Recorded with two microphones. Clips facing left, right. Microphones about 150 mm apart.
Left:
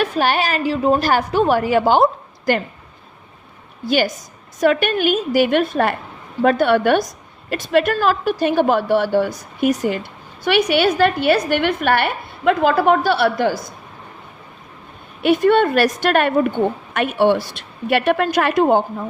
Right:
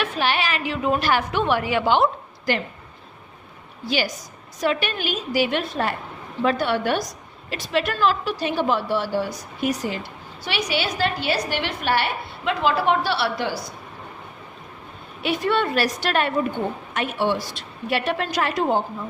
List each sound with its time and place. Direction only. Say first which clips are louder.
0.0 s a woman's voice: left 5 dB; 45° left (ahead or behind)
3.8 s a woman's voice: left 7 dB; 55° left (ahead or behind)
15.2 s a woman's voice: left 8 dB; 55° left (ahead or behind)